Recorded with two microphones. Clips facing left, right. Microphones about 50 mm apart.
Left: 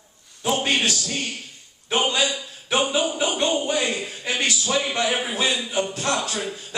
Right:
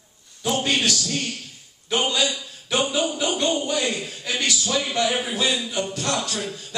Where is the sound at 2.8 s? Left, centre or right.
Centre.